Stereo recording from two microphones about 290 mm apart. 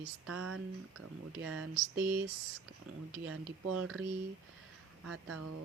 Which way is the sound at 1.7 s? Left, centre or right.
Centre.